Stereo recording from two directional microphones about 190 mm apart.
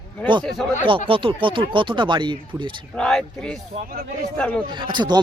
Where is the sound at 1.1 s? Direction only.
25° right (ahead or behind).